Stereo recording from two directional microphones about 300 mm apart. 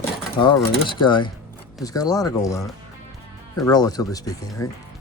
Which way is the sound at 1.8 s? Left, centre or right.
Centre.